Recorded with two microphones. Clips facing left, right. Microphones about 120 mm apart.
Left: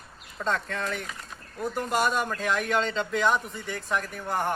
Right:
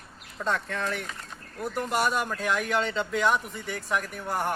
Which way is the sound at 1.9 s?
10° right (ahead or behind).